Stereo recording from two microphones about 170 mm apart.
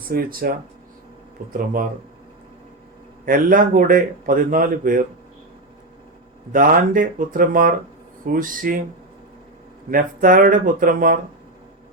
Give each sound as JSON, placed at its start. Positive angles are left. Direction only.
{"t": 0.1, "sound": "a man's voice", "side_deg": -60}
{"t": 3.2, "sound": "a man's voice", "side_deg": -55}
{"t": 6.5, "sound": "speech", "side_deg": -55}
{"t": 9.9, "sound": "a man's voice", "side_deg": -55}